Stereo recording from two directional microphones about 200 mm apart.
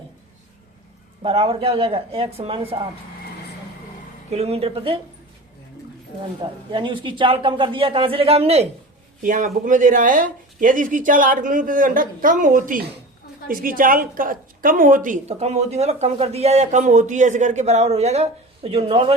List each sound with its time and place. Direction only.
1.2 s speech: 30° right (ahead or behind)
4.3 s speech: 30° right (ahead or behind)
6.4 s speech: 25° right (ahead or behind)
9.2 s a woman's voice: 40° right (ahead or behind)